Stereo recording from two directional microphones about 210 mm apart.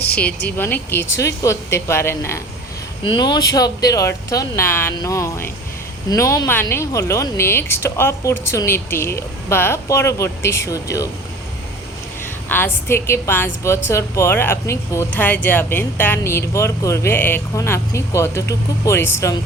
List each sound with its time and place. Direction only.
0.2 s a woman's voice: 5° left (ahead or behind)
12.5 s a woman's voice: 10° left (ahead or behind)